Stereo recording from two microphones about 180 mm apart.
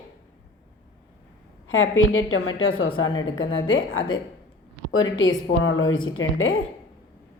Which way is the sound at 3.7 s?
90° left.